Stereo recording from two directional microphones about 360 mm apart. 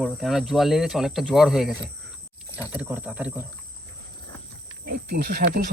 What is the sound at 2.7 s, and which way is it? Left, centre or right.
Speech, centre.